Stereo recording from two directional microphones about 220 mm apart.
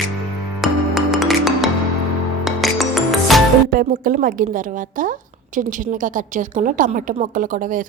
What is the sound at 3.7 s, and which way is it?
A woman's voice, 40° right (ahead or behind).